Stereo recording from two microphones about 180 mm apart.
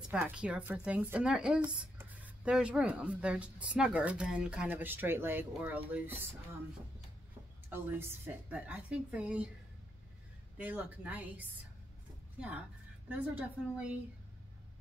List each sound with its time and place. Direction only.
0.1 s speech: 5° right (ahead or behind)
8.5 s speech: 10° right (ahead or behind)
10.6 s speech: 10° right (ahead or behind)
13.1 s speech: 5° right (ahead or behind)